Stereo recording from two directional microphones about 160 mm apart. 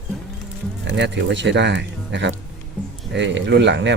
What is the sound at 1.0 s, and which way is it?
Speech, 90° right.